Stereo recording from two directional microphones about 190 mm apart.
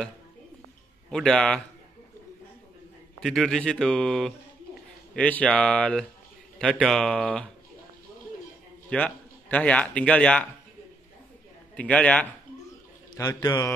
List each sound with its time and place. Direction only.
1.1 s speech: 5° left (ahead or behind)
3.2 s speech: centre (ahead or behind)
8.9 s speech: 5° left (ahead or behind)
11.7 s speech: 5° left (ahead or behind)
13.1 s speech: 20° left (ahead or behind)